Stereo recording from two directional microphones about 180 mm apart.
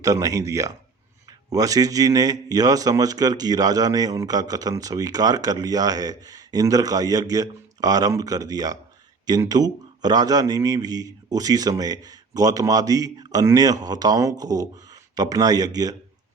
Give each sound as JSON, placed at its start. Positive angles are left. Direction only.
{"t": 0.0, "sound": "a man's voice", "side_deg": -20}